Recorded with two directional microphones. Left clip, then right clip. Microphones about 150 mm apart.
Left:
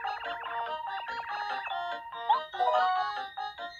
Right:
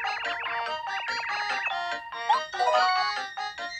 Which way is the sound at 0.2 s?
50° right (ahead or behind).